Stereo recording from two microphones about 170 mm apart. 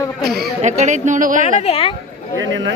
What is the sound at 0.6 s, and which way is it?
A woman's voice, 45° right (ahead or behind).